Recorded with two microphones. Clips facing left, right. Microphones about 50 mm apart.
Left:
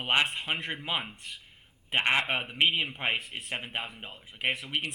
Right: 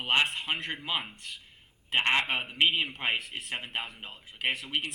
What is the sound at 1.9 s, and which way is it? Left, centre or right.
A man's voice, centre.